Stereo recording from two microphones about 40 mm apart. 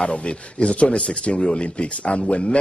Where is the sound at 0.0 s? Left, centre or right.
Left.